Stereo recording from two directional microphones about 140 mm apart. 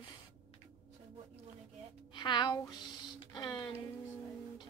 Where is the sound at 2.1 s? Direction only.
35° left (ahead or behind).